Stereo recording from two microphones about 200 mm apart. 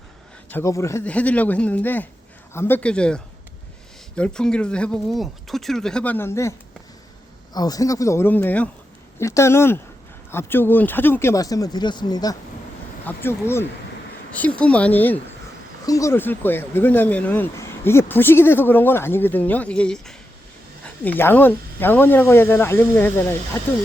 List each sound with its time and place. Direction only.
0.5 s speech: 15° left (ahead or behind)
7.5 s speech: 20° left (ahead or behind)